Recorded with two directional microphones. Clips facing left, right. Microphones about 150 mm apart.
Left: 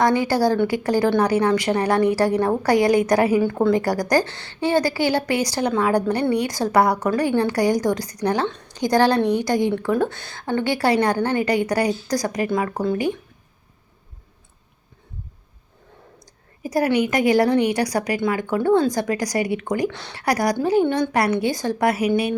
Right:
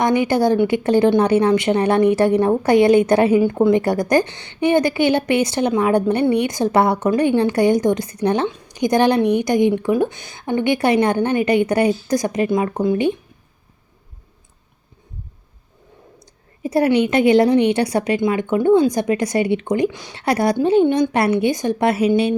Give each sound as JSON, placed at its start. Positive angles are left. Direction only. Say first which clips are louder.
{"t": 0.0, "sound": "a woman's voice", "louder": "right 2 dB", "side_deg": -20}
{"t": 16.6, "sound": "a woman's voice", "louder": "right 4 dB", "side_deg": -25}
{"t": 19.9, "sound": "speech", "louder": "even", "side_deg": -10}
{"t": 20.1, "sound": "a woman's voice", "louder": "right 3 dB", "side_deg": -25}